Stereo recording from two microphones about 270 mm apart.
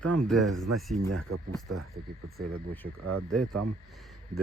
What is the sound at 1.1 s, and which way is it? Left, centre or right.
Speech, right.